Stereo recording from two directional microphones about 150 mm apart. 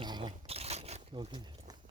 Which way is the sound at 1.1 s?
30° right (ahead or behind).